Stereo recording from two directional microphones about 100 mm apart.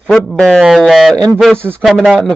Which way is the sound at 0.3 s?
5° left (ahead or behind).